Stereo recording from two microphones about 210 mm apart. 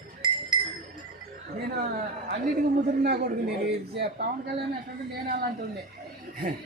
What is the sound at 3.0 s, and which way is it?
Speech, 45° right (ahead or behind).